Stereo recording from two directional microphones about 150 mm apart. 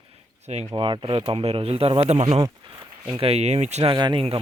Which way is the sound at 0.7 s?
35° right (ahead or behind).